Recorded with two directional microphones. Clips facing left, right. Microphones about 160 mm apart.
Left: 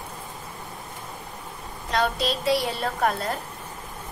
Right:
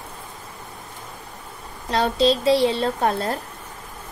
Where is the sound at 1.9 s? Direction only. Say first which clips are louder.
Right 6 dB; 30° right (ahead or behind).